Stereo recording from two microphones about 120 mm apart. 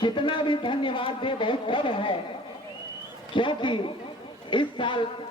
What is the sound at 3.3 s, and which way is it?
Speech, 45° left (ahead or behind).